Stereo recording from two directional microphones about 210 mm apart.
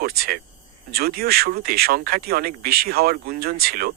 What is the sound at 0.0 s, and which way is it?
Speech, 45° right (ahead or behind).